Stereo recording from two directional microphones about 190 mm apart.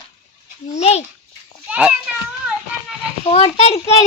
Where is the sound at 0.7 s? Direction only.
35° left (ahead or behind).